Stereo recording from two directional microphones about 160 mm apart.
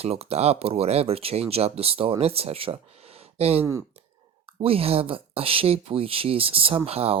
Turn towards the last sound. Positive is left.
turn(degrees=-35)  # may be behind; listen again after turning